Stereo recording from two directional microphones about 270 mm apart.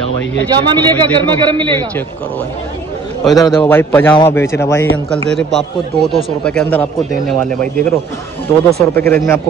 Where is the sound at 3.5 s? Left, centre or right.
Centre.